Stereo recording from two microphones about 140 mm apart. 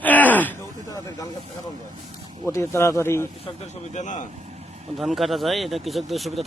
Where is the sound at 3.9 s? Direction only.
60° left (ahead or behind).